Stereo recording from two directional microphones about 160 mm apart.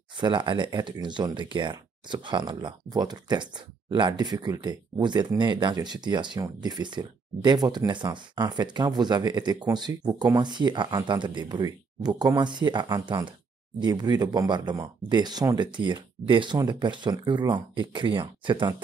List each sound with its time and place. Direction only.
0.2 s speech: 30° right (ahead or behind)